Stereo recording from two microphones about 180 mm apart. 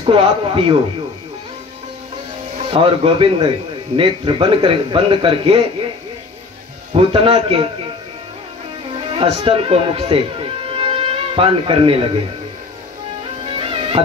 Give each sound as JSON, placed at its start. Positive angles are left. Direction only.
{"t": 0.0, "sound": "a man's voice", "side_deg": -30}
{"t": 2.7, "sound": "a man's voice", "side_deg": -30}
{"t": 6.9, "sound": "a man's voice", "side_deg": -30}
{"t": 9.1, "sound": "speech", "side_deg": -30}
{"t": 13.6, "sound": "music", "side_deg": -30}